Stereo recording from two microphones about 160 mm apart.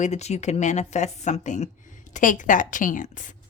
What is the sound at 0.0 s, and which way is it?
Speech, 45° left (ahead or behind).